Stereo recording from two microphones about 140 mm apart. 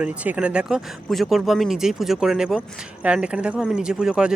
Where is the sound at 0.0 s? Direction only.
10° right (ahead or behind).